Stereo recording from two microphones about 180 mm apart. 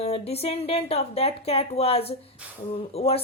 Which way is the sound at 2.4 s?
5° right (ahead or behind).